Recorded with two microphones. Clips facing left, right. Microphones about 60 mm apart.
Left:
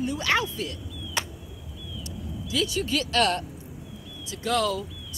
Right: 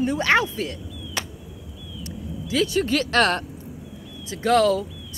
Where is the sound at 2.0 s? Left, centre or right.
Right.